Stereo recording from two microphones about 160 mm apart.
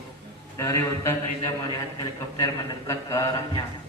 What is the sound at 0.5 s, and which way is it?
Speech, 20° left (ahead or behind).